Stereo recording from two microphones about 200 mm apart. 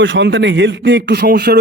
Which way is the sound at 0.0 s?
65° right (ahead or behind).